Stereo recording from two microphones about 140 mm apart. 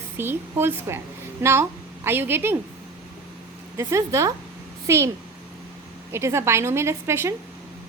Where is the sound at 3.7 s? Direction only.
20° right (ahead or behind).